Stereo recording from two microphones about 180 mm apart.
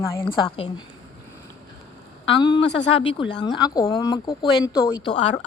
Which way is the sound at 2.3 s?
25° left (ahead or behind).